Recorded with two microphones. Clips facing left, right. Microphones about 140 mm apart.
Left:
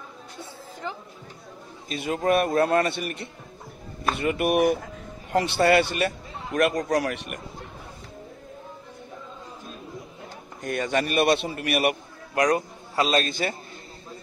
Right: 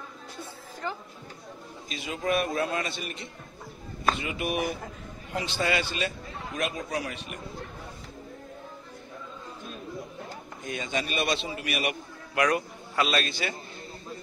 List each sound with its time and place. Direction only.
1.9 s a man's voice: 50° left (ahead or behind); by 7.3 s 75° left (ahead or behind)
10.6 s a man's voice: 65° left (ahead or behind)
12.4 s a man's voice: 35° left (ahead or behind)